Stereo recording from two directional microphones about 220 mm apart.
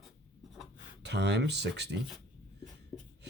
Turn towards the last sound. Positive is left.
turn(degrees=15)  # may be behind; listen again after turning